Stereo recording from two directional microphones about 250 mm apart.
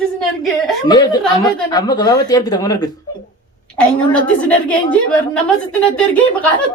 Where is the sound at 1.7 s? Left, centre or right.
Centre.